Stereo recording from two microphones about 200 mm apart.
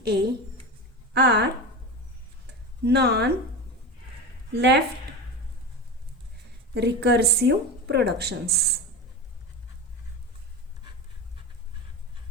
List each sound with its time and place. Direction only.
0.0 s speech: 55° right (ahead or behind)
2.8 s speech: 55° right (ahead or behind)
4.5 s speech: 60° right (ahead or behind)
6.7 s speech: 55° right (ahead or behind)